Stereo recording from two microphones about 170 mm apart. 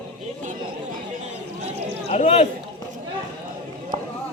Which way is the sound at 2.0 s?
35° left (ahead or behind).